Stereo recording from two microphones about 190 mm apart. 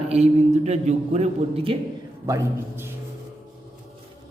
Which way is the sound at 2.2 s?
15° right (ahead or behind).